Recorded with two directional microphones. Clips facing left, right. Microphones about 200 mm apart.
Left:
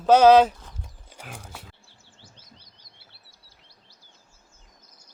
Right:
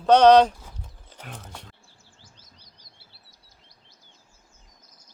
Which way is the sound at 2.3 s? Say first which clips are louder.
Left 3 dB; 25° left (ahead or behind).